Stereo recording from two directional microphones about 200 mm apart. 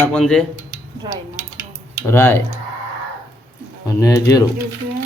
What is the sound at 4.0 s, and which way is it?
Speech, 15° left (ahead or behind).